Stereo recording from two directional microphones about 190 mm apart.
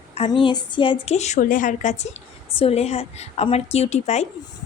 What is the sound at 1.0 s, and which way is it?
Speech, 35° left (ahead or behind).